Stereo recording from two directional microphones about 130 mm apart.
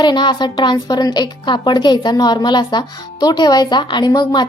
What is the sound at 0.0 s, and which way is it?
A woman's voice, 35° left (ahead or behind).